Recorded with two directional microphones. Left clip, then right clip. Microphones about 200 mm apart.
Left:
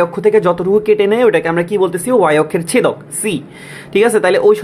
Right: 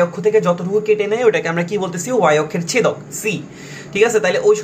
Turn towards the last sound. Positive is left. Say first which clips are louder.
# left 4 dB
turn(degrees=50)  # may be behind; listen again after turning